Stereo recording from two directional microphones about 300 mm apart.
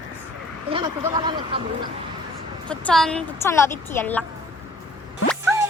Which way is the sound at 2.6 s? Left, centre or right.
Centre.